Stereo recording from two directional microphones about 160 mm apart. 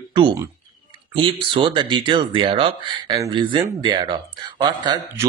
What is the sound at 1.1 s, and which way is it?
Speech, 35° right (ahead or behind).